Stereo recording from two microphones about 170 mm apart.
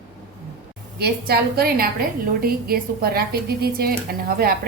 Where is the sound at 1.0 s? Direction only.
65° right (ahead or behind).